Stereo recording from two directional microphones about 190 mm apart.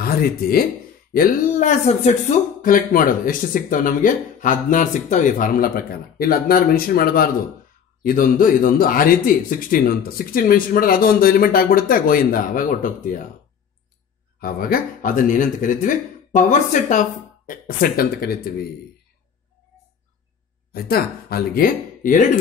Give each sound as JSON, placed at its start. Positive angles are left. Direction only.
{"t": 0.0, "sound": "speech", "side_deg": 55}
{"t": 14.4, "sound": "speech", "side_deg": 50}
{"t": 20.7, "sound": "speech", "side_deg": 55}